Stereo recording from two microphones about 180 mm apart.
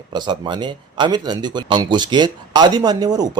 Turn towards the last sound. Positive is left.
turn(degrees=-20)  # may be behind; listen again after turning